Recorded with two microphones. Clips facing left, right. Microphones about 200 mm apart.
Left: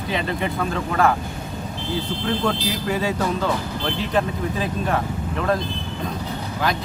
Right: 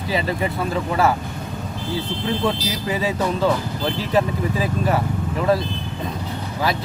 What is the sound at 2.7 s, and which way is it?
Speech, centre (ahead or behind).